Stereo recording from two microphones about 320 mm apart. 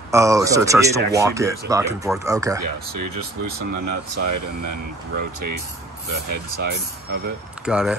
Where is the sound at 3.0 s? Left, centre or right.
Right.